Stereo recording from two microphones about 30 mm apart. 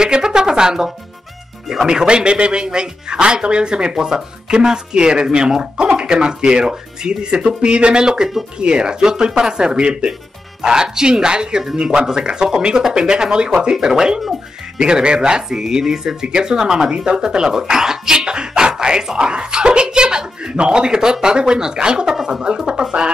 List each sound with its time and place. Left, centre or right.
0.0 s music: right
1.9 s speech: right
10.6 s speech: right
16.9 s speech: right
22.4 s speech: right